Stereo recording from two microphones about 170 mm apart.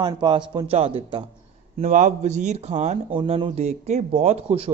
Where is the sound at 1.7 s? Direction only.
45° right (ahead or behind).